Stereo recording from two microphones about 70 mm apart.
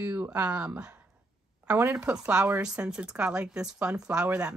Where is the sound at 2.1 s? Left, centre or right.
Centre.